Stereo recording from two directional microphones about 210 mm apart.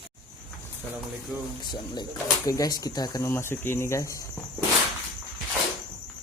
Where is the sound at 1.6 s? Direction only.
20° left (ahead or behind).